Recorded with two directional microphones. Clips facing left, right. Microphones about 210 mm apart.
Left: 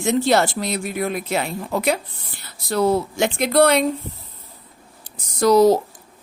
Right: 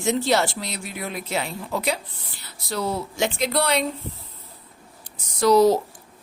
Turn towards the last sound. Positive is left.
turn(degrees=45)  # may be behind; listen again after turning